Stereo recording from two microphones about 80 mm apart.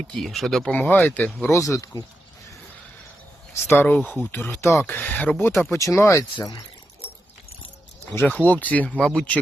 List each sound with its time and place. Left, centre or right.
0.1 s speech: centre
0.7 s speech: centre
1.5 s speech: left
3.7 s speech: left
5.7 s speech: left
8.3 s speech: centre